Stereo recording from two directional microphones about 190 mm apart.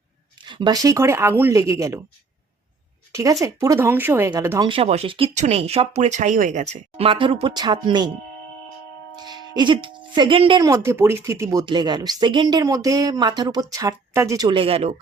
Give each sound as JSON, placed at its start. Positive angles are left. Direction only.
{"t": 0.4, "sound": "speech", "side_deg": -25}
{"t": 3.1, "sound": "speech", "side_deg": -15}
{"t": 4.7, "sound": "speech", "side_deg": -30}
{"t": 9.1, "sound": "speech", "side_deg": -20}